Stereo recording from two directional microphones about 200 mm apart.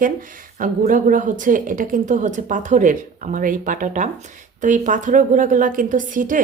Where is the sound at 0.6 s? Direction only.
40° right (ahead or behind).